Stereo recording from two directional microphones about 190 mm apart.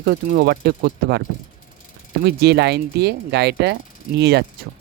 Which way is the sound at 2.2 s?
60° right (ahead or behind).